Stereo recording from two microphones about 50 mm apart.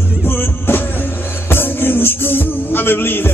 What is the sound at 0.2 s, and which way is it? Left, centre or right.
Music, left.